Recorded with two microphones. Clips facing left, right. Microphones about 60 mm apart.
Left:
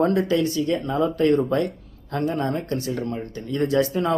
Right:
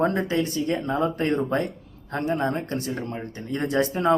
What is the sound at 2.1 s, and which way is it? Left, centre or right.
Speech, right.